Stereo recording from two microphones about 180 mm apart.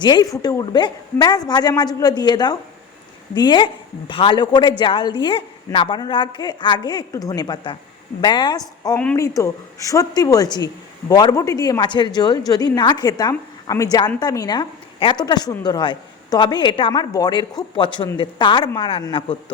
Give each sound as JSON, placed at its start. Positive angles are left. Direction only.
{"t": 0.0, "sound": "a woman's voice", "side_deg": 25}